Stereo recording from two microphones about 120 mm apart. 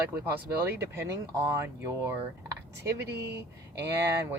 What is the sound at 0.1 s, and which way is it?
Speech, 15° right (ahead or behind).